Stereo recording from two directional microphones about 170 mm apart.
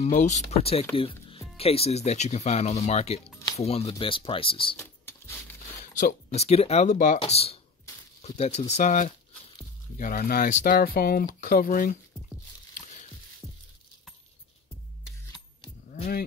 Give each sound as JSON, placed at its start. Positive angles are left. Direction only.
{"t": 0.0, "sound": "speech", "side_deg": 45}
{"t": 0.9, "sound": "music", "side_deg": 35}
{"t": 1.6, "sound": "speech", "side_deg": 35}
{"t": 4.7, "sound": "a sound", "side_deg": 15}
{"t": 6.3, "sound": "speech", "side_deg": 35}
{"t": 7.2, "sound": "speech", "side_deg": 35}